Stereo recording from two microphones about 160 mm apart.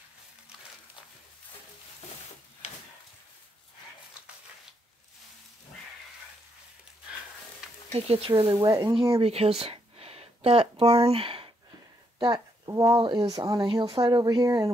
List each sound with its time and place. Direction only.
7.9 s speech: 40° right (ahead or behind); by 8.9 s 20° right (ahead or behind)
9.2 s a woman's voice: 40° right (ahead or behind); by 14.7 s 20° right (ahead or behind)